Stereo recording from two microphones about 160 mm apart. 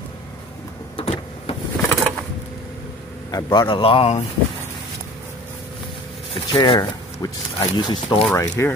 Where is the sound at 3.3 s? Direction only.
25° left (ahead or behind).